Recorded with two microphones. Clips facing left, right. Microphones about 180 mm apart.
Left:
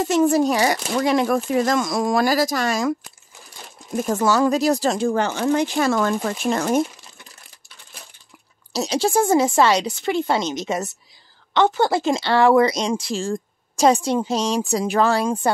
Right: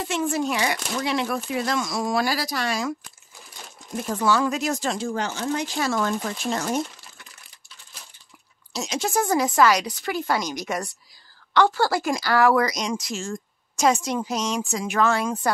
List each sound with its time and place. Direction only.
0.0 s speech: 40° left (ahead or behind)
3.9 s speech: 45° left (ahead or behind)
4.9 s speech: 55° left (ahead or behind)
8.7 s speech: 35° left (ahead or behind)